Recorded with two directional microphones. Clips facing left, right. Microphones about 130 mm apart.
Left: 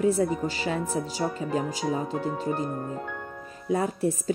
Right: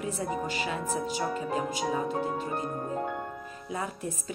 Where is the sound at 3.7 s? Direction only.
35° left (ahead or behind).